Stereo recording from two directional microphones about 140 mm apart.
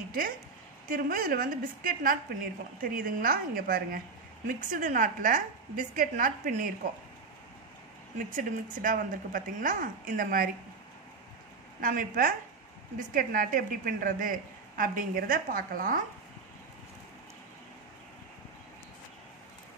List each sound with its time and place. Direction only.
0.8 s a woman's voice: 85° right
4.5 s a woman's voice: 70° right (ahead or behind)
8.3 s a woman's voice: 70° right (ahead or behind); by 10.5 s 90° right
11.8 s a woman's voice: 80° right